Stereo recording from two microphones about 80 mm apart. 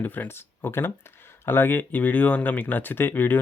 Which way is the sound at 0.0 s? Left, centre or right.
Left.